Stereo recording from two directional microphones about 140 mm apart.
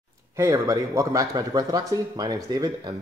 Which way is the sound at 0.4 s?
25° right (ahead or behind).